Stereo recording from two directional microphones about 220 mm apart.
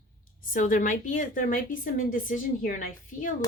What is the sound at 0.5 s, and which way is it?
Speech, 35° left (ahead or behind).